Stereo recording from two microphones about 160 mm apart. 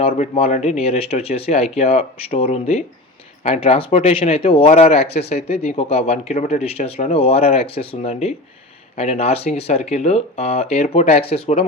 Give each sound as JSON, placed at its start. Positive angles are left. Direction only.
{"t": 0.0, "sound": "speech", "side_deg": 40}